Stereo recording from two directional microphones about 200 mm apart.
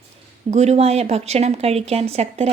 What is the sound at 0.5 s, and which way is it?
Speech, 35° right (ahead or behind).